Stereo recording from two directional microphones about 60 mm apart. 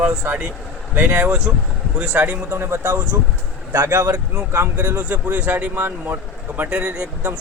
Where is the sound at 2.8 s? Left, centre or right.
Right.